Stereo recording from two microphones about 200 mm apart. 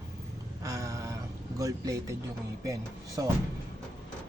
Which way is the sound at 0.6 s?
15° right (ahead or behind).